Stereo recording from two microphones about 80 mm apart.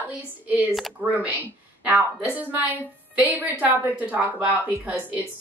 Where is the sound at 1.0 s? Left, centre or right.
Centre.